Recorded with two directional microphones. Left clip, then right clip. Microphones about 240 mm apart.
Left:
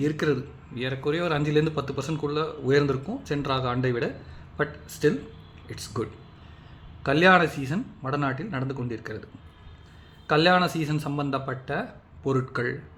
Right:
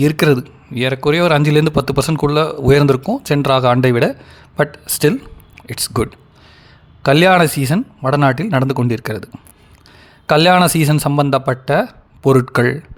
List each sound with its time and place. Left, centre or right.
0.0 s a man's voice: right